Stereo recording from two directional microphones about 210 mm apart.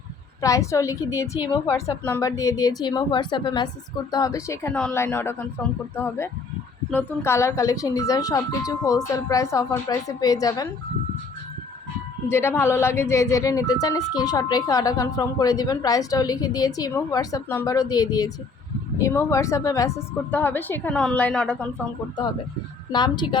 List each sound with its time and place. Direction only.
0.4 s speech: 15° left (ahead or behind)
12.3 s speech: 10° left (ahead or behind)
22.9 s a woman's voice: 20° left (ahead or behind)